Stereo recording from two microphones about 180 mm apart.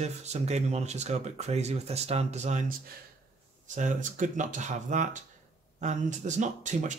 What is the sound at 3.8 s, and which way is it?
Speech, 45° right (ahead or behind).